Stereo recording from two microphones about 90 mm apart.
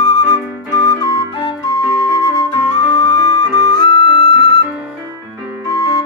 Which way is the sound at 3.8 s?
55° left (ahead or behind).